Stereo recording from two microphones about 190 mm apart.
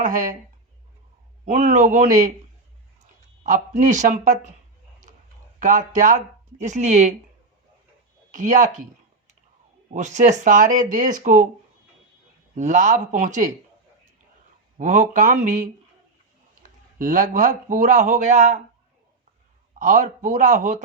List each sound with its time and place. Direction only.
0.0 s speech: 45° right (ahead or behind)
1.5 s speech: 40° right (ahead or behind)
3.4 s speech: 40° right (ahead or behind)
5.5 s speech: 40° right (ahead or behind)
8.3 s speech: 40° right (ahead or behind)
9.9 s speech: 40° right (ahead or behind)
12.5 s speech: 40° right (ahead or behind)
14.8 s speech: 40° right (ahead or behind)
17.0 s speech: 45° right (ahead or behind)
19.8 s speech: 40° right (ahead or behind)